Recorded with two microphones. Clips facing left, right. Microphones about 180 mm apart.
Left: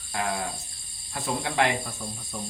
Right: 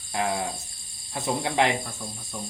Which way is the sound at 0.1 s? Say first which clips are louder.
Right 2 dB; 20° right (ahead or behind).